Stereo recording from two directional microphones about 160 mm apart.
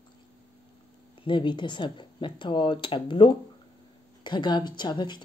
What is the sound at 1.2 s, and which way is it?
A woman's voice, 30° left (ahead or behind).